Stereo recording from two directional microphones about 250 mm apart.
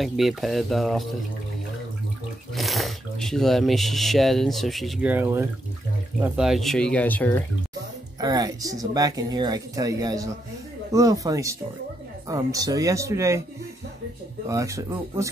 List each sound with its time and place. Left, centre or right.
0.0 s speech: centre
2.5 s speech: centre
8.2 s speech: centre
14.5 s speech: centre